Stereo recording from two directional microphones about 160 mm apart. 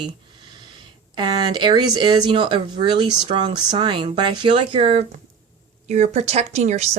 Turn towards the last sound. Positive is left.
turn(degrees=-45)  # may be behind; listen again after turning